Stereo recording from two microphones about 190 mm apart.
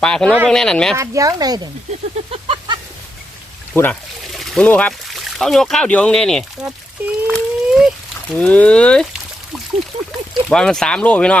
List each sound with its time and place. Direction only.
0.0 s speech: 5° left (ahead or behind)
0.3 s speech: 10° right (ahead or behind)
0.5 s speech: 5° left (ahead or behind)
0.9 s speech: 15° right (ahead or behind)
2.3 s a sound: 30° right (ahead or behind)
3.7 s speech: 15° left (ahead or behind)
4.3 s speech: centre (ahead or behind)
10.5 s speech: 5° left (ahead or behind)